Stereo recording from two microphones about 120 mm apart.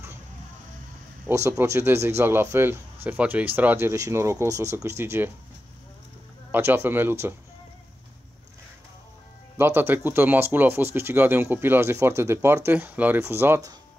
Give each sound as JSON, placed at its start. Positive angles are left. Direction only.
{"t": 1.3, "sound": "speech", "side_deg": -20}
{"t": 6.5, "sound": "speech", "side_deg": -15}
{"t": 9.6, "sound": "speech", "side_deg": -20}